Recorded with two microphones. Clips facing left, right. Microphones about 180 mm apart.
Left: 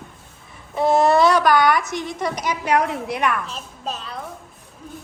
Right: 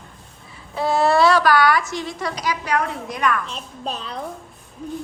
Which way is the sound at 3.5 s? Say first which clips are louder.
Right 1 dB; centre (ahead or behind).